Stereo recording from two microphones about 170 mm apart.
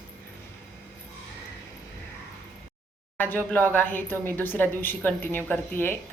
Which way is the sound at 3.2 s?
10° left (ahead or behind).